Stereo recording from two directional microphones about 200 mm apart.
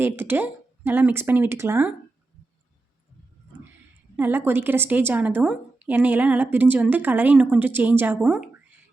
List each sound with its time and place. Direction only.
0.0 s a woman's voice: 10° right (ahead or behind)
4.2 s a woman's voice: 10° right (ahead or behind)